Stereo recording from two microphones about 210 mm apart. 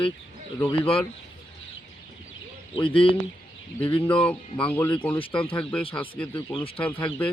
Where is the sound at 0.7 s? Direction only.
25° left (ahead or behind).